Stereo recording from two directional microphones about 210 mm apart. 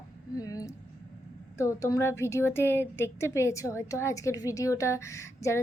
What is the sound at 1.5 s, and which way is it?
A woman's voice, 15° left (ahead or behind).